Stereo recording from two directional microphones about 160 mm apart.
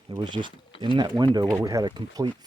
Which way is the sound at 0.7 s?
35° left (ahead or behind).